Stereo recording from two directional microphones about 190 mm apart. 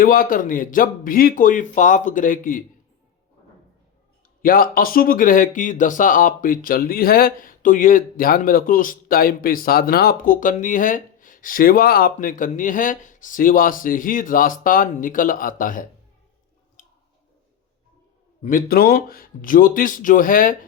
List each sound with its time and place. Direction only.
0.0 s speech: 50° left (ahead or behind)
4.4 s speech: 50° left (ahead or behind)
16.8 s a sound: 40° left (ahead or behind)
18.4 s speech: 50° left (ahead or behind)